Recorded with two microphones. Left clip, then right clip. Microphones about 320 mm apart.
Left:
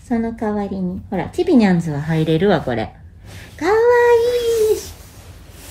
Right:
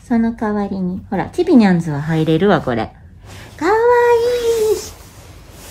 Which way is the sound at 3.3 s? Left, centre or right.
Centre.